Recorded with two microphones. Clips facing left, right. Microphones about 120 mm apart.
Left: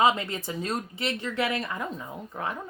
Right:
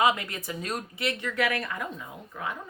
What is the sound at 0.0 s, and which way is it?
Speech, 30° left (ahead or behind).